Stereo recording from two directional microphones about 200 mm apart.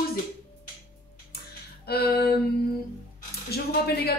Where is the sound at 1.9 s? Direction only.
50° left (ahead or behind).